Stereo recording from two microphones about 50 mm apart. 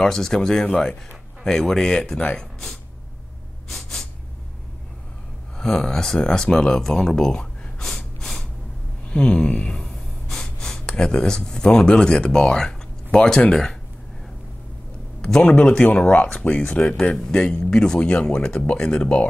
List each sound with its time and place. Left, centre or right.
0.0 s speech: centre
3.7 s gasp: centre
5.6 s speech: centre
15.4 s speech: left